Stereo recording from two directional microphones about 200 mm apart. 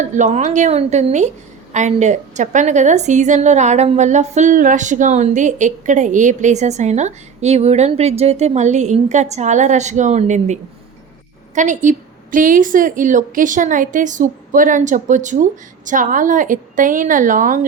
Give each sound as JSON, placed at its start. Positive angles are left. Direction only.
{"t": 0.0, "sound": "a woman's voice", "side_deg": -35}